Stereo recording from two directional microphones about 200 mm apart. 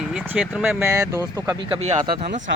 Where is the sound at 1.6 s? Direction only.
30° right (ahead or behind).